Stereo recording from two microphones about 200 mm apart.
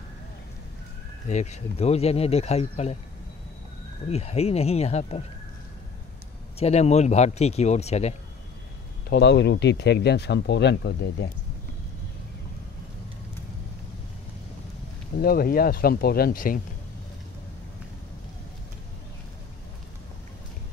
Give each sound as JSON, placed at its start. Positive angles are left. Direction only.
{"t": 1.2, "sound": "speech", "side_deg": 35}
{"t": 4.1, "sound": "speech", "side_deg": 30}
{"t": 6.6, "sound": "speech", "side_deg": 35}
{"t": 9.1, "sound": "speech", "side_deg": 55}
{"t": 15.1, "sound": "speech", "side_deg": 50}